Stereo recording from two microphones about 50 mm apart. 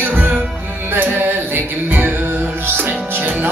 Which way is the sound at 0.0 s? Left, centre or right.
Right.